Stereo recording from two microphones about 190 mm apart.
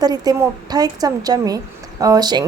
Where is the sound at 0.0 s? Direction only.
20° right (ahead or behind).